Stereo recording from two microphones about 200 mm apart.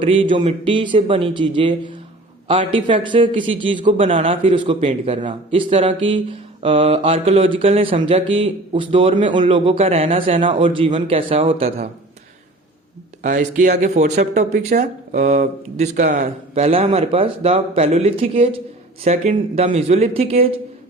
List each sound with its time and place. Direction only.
0.0 s speech: 25° right (ahead or behind)
13.2 s speech: 40° right (ahead or behind)